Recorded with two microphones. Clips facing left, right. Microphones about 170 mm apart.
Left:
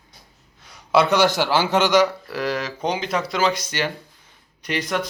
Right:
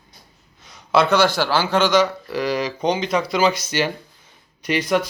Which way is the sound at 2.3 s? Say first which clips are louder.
Right 3 dB; centre (ahead or behind).